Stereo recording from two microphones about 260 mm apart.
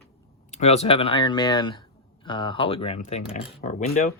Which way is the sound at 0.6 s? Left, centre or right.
Left.